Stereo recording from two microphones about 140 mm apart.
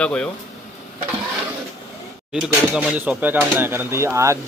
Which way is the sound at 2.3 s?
5° right (ahead or behind).